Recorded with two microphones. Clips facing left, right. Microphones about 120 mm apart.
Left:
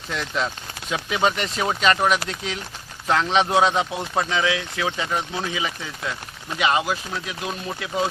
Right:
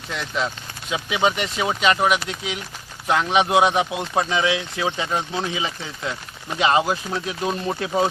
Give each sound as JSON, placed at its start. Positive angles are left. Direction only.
{"t": 0.1, "sound": "speech", "side_deg": 0}